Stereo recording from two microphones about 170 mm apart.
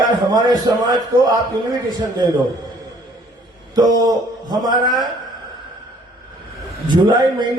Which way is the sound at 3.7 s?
25° right (ahead or behind).